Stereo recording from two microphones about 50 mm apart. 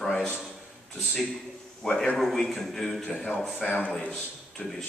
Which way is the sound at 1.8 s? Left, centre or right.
Centre.